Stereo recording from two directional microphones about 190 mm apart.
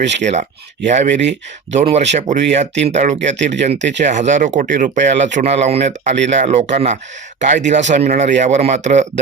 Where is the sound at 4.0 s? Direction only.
40° right (ahead or behind).